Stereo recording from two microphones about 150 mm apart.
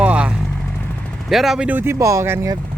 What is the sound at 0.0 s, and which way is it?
Vehicle, 10° right (ahead or behind).